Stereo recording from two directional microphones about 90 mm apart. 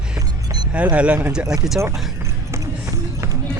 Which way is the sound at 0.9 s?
15° right (ahead or behind).